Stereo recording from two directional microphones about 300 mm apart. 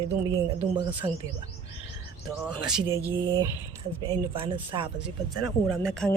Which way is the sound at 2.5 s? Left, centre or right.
Centre.